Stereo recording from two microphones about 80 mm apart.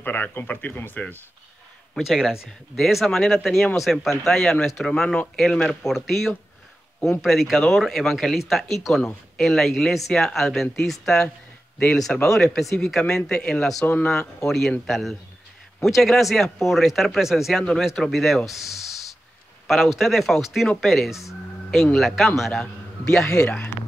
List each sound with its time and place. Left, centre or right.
0.0 s speech: left
2.0 s speech: centre
21.3 s music: centre
21.9 s speech: centre